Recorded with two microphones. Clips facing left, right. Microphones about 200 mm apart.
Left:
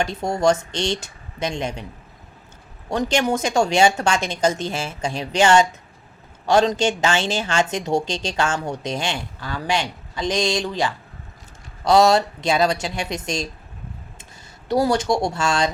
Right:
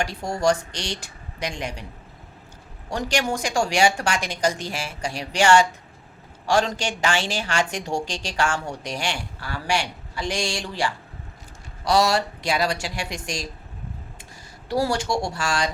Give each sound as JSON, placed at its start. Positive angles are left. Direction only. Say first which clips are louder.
{"t": 0.0, "sound": "speech", "louder": "left 3 dB", "side_deg": 20}
{"t": 2.9, "sound": "speech", "louder": "left 4 dB", "side_deg": 20}
{"t": 14.7, "sound": "speech", "louder": "left 4 dB", "side_deg": 20}